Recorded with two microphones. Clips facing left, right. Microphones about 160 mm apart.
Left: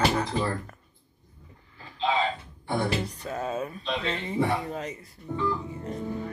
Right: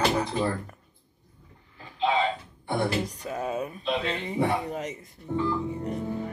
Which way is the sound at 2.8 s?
10° right (ahead or behind).